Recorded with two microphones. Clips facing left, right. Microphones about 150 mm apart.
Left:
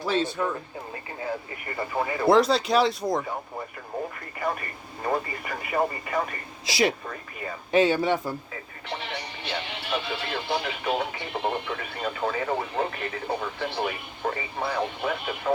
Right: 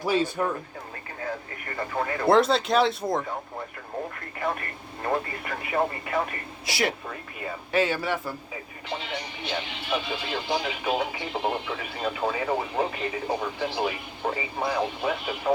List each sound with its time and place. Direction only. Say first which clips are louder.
0.0 s speech: right 1 dB; 10° right (ahead or behind)
1.7 s speech: left 1 dB; 10° left (ahead or behind)
4.4 s speech: even; centre (ahead or behind)
6.7 s speech: left 3 dB; 25° left (ahead or behind)
7.1 s speech: even; 5° right (ahead or behind)
7.7 s speech: left 4 dB; 20° left (ahead or behind)
9.1 s speech: right 1 dB; 65° left (ahead or behind)
10.3 s speech: right 1 dB; 10° right (ahead or behind)